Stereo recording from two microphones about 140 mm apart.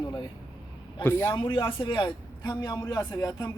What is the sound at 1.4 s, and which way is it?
A man's voice, 35° left (ahead or behind).